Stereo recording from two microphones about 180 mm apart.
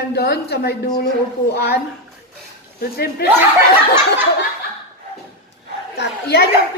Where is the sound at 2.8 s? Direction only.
60° left (ahead or behind).